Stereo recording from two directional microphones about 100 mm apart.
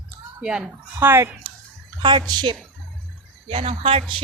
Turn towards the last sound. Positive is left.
turn(degrees=-70)  # may be behind; listen again after turning